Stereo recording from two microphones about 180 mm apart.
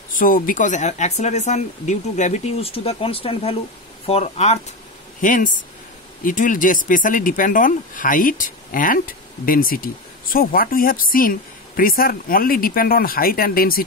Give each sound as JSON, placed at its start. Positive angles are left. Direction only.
{"t": 0.2, "sound": "speech", "side_deg": 50}
{"t": 5.2, "sound": "speech", "side_deg": 45}